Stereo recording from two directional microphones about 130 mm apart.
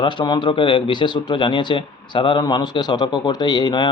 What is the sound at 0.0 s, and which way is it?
Speech, 35° left (ahead or behind).